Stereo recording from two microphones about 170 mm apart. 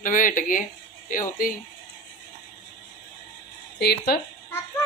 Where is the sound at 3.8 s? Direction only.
70° left (ahead or behind).